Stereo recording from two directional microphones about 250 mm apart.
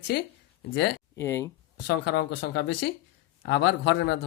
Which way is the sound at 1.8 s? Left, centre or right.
Left.